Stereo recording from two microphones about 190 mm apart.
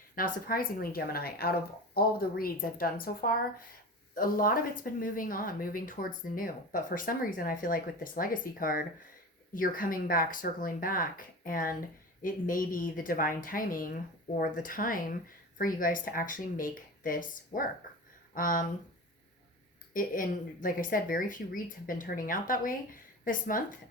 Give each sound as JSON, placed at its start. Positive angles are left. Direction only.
{"t": 0.2, "sound": "speech", "side_deg": 50}
{"t": 19.9, "sound": "speech", "side_deg": 45}